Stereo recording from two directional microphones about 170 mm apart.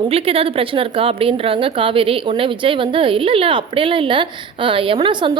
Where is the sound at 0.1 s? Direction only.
35° right (ahead or behind).